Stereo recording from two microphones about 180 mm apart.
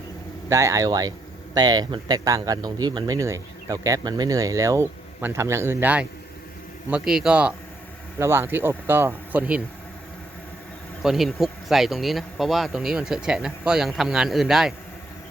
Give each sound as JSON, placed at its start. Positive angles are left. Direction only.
{"t": 0.5, "sound": "speech", "side_deg": -15}
{"t": 11.0, "sound": "speech", "side_deg": 0}